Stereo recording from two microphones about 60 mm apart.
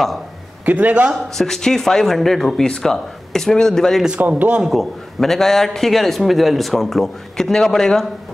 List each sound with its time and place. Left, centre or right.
0.7 s a man's voice: right
1.1 s speech: centre
4.4 s a man's voice: right
4.6 s a man's voice: centre